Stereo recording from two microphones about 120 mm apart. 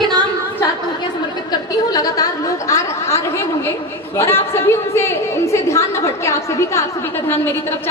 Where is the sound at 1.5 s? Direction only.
30° left (ahead or behind).